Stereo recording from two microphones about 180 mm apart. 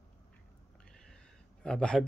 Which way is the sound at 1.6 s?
5° left (ahead or behind).